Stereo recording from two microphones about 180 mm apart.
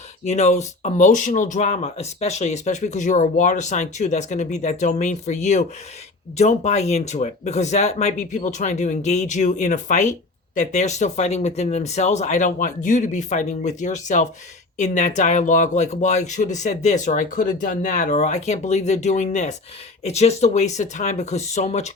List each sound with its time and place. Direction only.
0.3 s speech: 40° left (ahead or behind)